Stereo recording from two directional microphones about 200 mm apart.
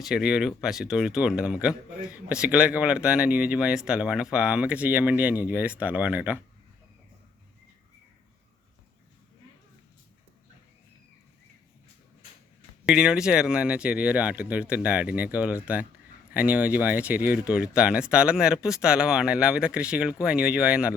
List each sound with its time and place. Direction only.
0.0 s speech: 5° right (ahead or behind)
12.8 s speech: 5° right (ahead or behind)